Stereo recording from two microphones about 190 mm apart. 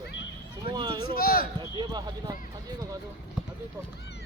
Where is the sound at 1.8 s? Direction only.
20° right (ahead or behind).